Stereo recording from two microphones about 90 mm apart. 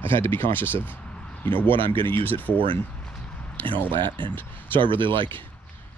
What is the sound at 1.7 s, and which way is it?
Speech, 70° right (ahead or behind).